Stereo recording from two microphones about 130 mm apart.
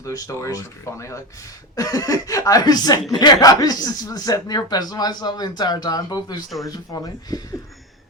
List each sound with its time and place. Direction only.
0.0 s speech: 25° left (ahead or behind)